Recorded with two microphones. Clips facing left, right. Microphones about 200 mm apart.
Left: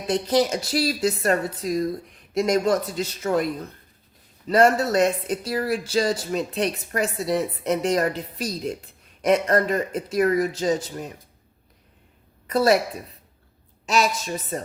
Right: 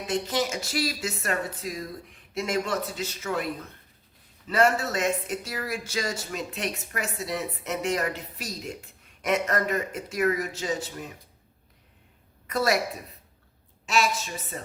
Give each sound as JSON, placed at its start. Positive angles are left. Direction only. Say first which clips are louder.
{"t": 0.1, "sound": "speech", "louder": "left 7 dB", "side_deg": 35}
{"t": 12.5, "sound": "a woman's voice", "louder": "left 6 dB", "side_deg": 30}
{"t": 13.8, "sound": "speech", "louder": "left 3 dB", "side_deg": 35}